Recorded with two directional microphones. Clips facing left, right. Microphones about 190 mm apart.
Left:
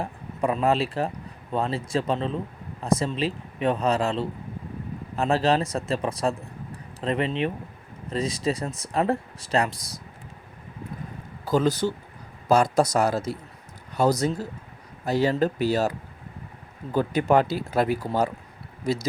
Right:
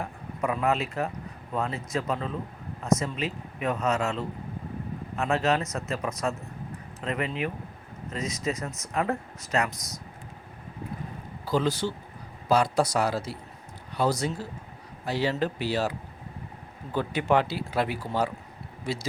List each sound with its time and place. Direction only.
0.0 s speech: 30° left (ahead or behind)
11.4 s speech: 45° left (ahead or behind)
16.9 s speech: 45° left (ahead or behind)